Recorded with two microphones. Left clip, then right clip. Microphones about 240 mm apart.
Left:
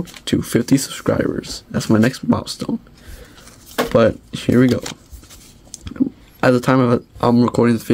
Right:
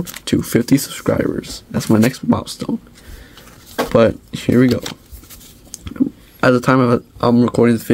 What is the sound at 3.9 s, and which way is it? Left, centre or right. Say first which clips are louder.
Speech: right 2 dB; centre.